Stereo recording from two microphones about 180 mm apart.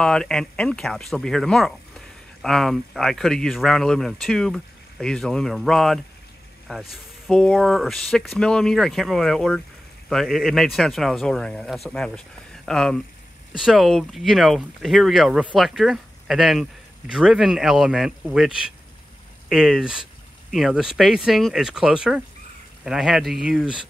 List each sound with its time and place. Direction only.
0.0 s speech: 5° left (ahead or behind)